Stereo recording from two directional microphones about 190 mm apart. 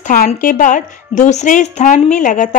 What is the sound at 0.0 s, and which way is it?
A woman's voice, 45° left (ahead or behind).